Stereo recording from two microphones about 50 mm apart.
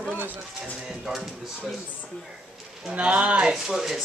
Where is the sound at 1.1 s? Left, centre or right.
Centre.